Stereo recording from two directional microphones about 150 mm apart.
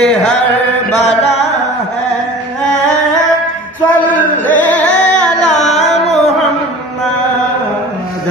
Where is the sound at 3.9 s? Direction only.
10° left (ahead or behind).